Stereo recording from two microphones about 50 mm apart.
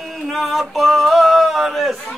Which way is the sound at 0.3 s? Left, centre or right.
Centre.